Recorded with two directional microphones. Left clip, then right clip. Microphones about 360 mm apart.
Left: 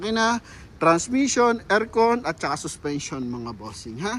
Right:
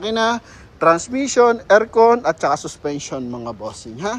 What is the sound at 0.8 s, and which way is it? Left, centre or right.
Speech, centre.